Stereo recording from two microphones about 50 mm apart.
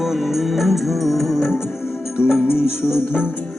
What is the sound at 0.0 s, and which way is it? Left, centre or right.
Music, centre.